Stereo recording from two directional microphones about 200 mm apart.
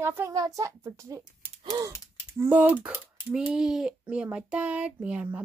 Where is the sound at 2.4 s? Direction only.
10° right (ahead or behind).